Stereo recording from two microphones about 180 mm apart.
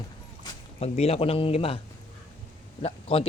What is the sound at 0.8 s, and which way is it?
Speech, 35° left (ahead or behind).